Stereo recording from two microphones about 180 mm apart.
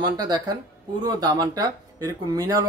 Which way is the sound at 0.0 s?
20° right (ahead or behind).